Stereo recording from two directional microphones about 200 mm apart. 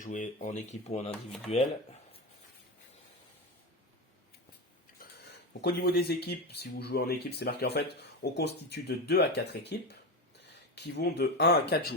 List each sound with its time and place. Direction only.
0.0 s speech: 40° left (ahead or behind)
5.6 s speech: 50° left (ahead or behind)